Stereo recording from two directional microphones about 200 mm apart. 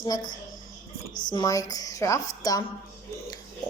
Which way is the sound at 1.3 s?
20° left (ahead or behind).